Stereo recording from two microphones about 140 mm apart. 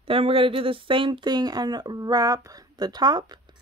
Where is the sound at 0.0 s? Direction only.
40° right (ahead or behind).